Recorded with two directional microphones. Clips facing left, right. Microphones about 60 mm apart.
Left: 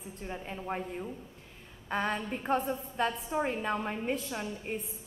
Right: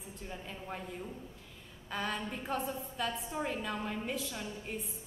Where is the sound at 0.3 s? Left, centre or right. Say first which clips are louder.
Left 7 dB; left.